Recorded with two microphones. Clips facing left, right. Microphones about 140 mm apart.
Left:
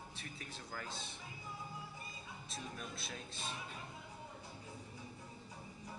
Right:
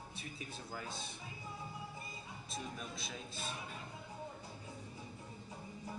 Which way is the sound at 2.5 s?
Centre (ahead or behind).